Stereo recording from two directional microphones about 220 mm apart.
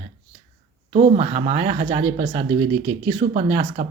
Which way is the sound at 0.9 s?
30° right (ahead or behind).